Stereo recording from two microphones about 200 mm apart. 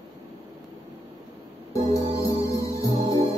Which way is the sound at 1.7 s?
15° left (ahead or behind).